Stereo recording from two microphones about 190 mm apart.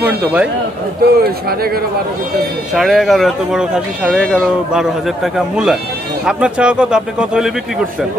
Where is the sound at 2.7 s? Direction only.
Centre (ahead or behind).